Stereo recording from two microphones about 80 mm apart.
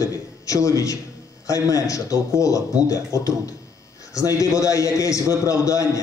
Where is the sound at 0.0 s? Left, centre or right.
Left.